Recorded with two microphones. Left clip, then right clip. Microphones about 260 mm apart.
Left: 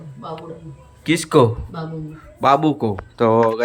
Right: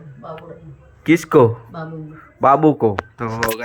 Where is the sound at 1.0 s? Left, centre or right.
Centre.